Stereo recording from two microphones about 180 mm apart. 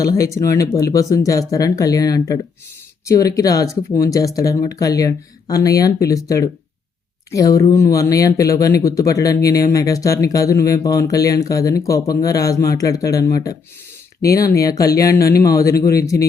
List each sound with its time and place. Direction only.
0.0 s speech: 20° left (ahead or behind)